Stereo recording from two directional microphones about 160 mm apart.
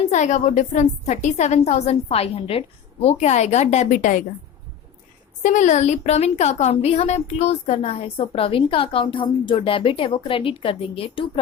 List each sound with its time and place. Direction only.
0.1 s a woman's voice: 45° left (ahead or behind)
5.4 s a woman's voice: 50° left (ahead or behind); by 11.3 s 35° left (ahead or behind)